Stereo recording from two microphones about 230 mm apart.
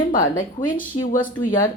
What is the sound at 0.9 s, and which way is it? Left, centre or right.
Speech, left.